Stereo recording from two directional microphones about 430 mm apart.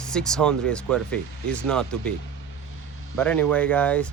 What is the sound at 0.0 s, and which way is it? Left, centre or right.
Speech, centre.